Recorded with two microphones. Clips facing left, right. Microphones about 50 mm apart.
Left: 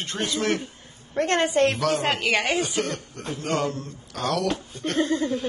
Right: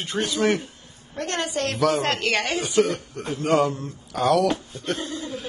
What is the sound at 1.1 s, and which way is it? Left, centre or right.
Speech, left.